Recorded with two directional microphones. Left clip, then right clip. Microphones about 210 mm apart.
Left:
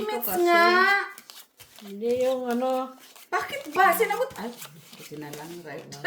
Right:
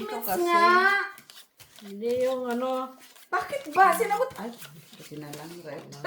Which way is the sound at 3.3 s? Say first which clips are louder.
Right 1 dB; 40° left (ahead or behind).